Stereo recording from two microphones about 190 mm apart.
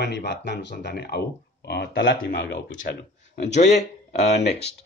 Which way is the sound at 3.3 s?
35° left (ahead or behind).